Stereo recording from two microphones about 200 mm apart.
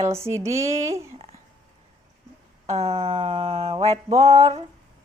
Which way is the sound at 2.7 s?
30° right (ahead or behind).